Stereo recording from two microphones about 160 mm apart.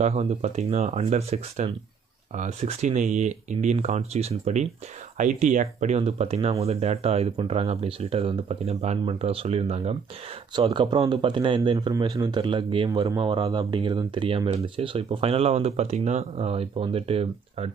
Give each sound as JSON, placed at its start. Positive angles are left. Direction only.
{"t": 0.0, "sound": "speech", "side_deg": -40}